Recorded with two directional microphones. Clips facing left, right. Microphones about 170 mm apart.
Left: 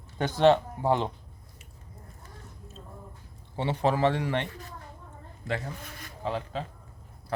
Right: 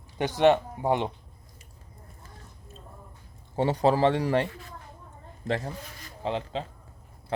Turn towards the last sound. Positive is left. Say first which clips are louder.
# right 2 dB
turn(degrees=-25)  # may be behind; listen again after turning